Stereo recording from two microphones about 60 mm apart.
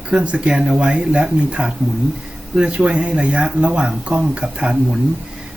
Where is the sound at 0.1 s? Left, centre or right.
Centre.